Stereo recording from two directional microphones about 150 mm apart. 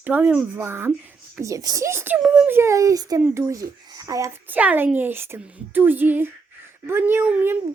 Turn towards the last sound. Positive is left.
turn(degrees=-15)  # may be behind; listen again after turning